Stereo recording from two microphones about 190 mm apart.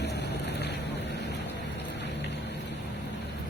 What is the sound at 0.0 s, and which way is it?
Boat, 60° left (ahead or behind).